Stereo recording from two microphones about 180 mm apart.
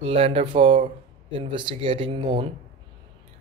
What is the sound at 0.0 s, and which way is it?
Speech, 30° right (ahead or behind).